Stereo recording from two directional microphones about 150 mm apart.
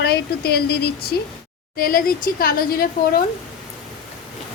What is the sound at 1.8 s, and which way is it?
Speech, 75° left (ahead or behind).